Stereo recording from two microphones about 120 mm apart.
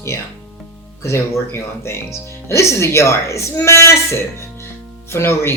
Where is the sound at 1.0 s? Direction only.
20° left (ahead or behind).